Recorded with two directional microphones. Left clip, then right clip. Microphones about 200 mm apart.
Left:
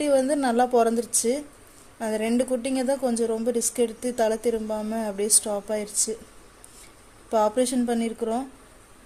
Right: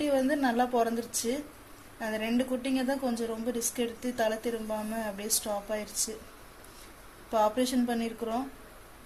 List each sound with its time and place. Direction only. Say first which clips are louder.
0.0 s a woman's voice: left 6 dB; 65° left (ahead or behind)
7.3 s a woman's voice: left 5 dB; 65° left (ahead or behind)